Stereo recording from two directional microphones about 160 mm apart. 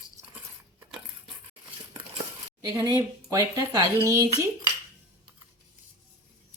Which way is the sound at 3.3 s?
20° right (ahead or behind).